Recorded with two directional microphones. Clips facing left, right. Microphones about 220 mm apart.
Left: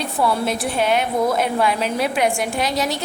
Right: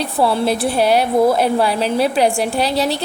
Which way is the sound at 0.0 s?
30° right (ahead or behind).